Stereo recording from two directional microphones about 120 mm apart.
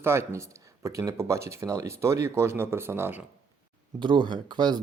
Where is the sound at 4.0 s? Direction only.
40° right (ahead or behind).